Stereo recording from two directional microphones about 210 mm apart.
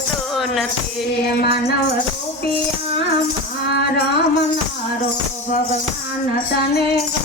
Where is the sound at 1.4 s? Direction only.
50° left (ahead or behind).